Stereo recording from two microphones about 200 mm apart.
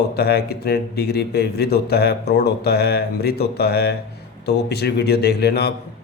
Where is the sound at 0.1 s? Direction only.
50° left (ahead or behind).